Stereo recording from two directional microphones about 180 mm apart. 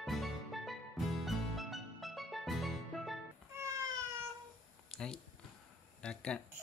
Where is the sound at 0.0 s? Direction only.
Centre (ahead or behind).